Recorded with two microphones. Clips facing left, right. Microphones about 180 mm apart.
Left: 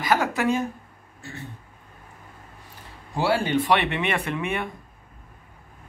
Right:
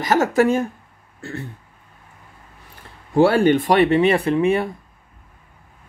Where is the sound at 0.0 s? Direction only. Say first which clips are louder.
Right 6 dB; 45° right (ahead or behind).